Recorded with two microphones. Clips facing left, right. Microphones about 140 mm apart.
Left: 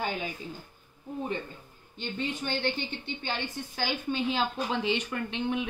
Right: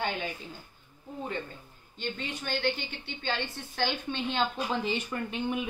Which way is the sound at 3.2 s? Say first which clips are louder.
Right 3 dB; 10° left (ahead or behind).